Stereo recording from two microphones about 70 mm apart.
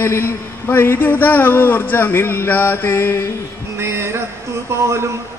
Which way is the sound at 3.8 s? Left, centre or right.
Right.